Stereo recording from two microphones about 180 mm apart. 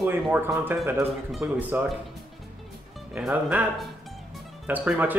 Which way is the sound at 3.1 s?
5° right (ahead or behind).